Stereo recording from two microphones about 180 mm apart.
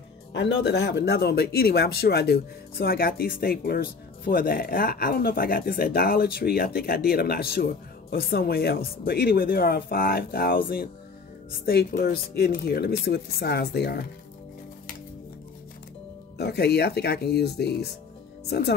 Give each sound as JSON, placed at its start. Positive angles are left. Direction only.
{"t": 0.3, "sound": "speech", "side_deg": 75}
{"t": 16.3, "sound": "speech", "side_deg": 65}